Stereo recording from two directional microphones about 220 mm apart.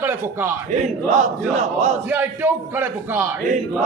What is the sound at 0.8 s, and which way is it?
A man's voice, 30° right (ahead or behind).